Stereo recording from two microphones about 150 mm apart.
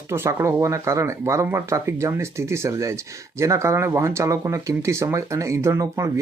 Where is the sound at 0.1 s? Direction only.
15° right (ahead or behind).